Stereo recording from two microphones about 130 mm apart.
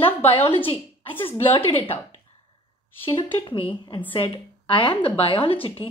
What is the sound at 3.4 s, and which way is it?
A woman's voice, 40° left (ahead or behind).